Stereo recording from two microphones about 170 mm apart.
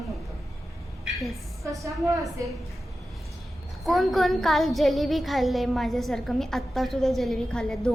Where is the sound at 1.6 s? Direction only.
20° right (ahead or behind).